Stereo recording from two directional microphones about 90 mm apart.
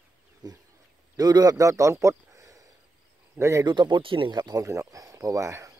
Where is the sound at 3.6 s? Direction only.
55° right (ahead or behind); by 4.3 s 75° right (ahead or behind).